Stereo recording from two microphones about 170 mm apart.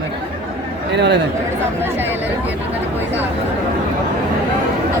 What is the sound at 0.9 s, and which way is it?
Speech, 90° right.